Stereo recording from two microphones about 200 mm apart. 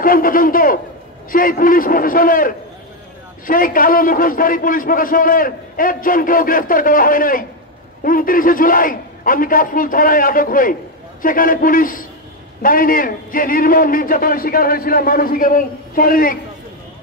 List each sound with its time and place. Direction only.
0.0 s a man's voice: 45° left (ahead or behind)